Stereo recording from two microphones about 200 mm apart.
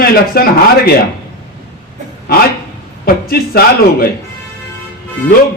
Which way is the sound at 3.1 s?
50° left (ahead or behind).